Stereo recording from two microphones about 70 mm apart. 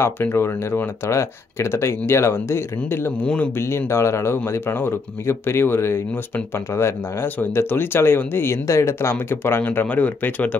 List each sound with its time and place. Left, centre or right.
0.0 s speech: left